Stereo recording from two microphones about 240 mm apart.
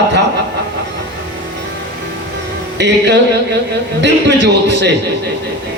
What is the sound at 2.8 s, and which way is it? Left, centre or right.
A man's voice, right.